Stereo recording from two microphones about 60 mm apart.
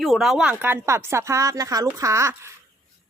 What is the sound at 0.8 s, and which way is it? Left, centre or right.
A woman's voice, right.